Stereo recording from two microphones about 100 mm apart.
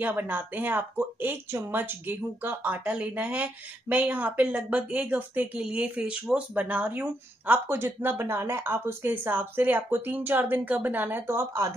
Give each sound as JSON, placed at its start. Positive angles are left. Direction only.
{"t": 0.0, "sound": "speech", "side_deg": -20}